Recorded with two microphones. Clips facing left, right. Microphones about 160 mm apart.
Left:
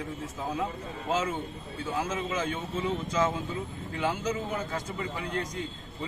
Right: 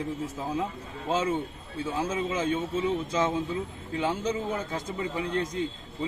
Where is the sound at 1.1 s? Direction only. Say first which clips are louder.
Right 3 dB; 30° right (ahead or behind).